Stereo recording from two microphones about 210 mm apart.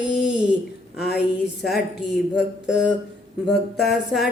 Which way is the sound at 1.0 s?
50° left (ahead or behind).